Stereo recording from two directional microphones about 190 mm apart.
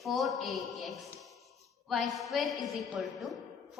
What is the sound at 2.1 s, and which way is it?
A woman's voice, centre (ahead or behind).